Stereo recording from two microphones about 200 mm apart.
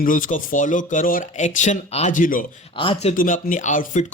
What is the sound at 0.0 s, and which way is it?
Speech, 40° left (ahead or behind).